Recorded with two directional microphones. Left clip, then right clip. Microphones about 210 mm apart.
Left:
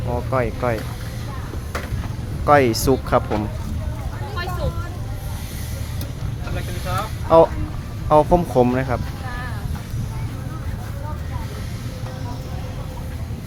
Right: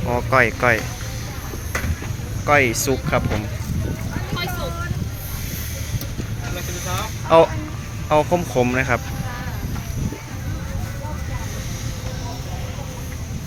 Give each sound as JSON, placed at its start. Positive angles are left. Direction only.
{"t": 0.1, "sound": "speech", "side_deg": -5}
{"t": 2.5, "sound": "speech", "side_deg": 25}
{"t": 7.3, "sound": "speech", "side_deg": 15}
{"t": 8.7, "sound": "speech", "side_deg": 10}